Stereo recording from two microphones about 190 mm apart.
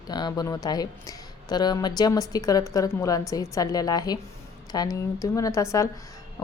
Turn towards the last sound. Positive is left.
turn(degrees=15)  # may be behind; listen again after turning